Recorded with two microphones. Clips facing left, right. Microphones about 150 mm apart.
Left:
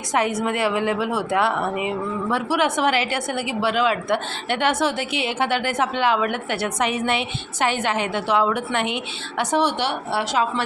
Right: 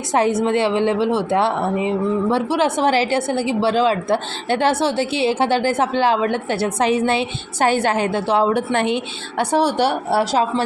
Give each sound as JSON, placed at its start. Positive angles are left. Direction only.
{"t": 0.1, "sound": "a woman's voice", "side_deg": -30}